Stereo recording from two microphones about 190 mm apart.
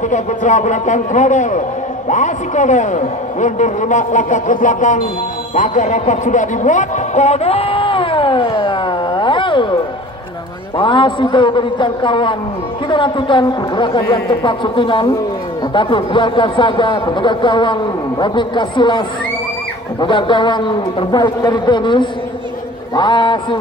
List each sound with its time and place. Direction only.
0.1 s a man's voice: 40° left (ahead or behind)
10.8 s speech: 25° left (ahead or behind)